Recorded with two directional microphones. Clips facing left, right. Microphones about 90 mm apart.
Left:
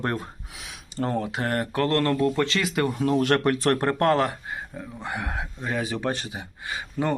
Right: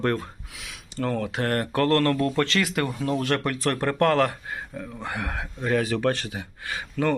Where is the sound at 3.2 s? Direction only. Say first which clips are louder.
Left 4 dB; 40° left (ahead or behind).